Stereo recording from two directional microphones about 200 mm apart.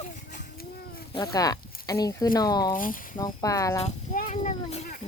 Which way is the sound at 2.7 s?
45° left (ahead or behind).